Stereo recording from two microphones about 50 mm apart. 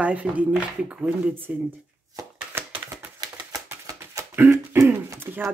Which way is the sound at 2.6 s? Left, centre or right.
Right.